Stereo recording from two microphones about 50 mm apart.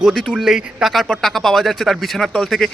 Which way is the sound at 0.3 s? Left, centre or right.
Centre.